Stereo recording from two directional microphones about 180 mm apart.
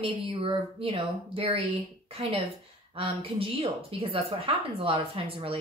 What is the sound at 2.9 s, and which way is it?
Speech, 30° right (ahead or behind).